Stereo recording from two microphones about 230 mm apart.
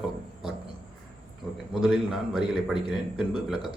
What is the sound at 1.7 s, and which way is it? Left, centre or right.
A man's voice, centre.